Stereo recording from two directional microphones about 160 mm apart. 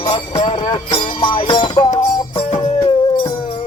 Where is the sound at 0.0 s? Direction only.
35° left (ahead or behind).